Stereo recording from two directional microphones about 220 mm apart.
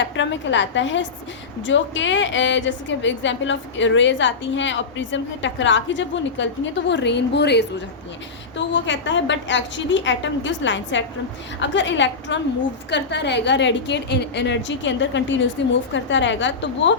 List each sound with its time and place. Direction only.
0.0 s a woman's voice: 55° left (ahead or behind)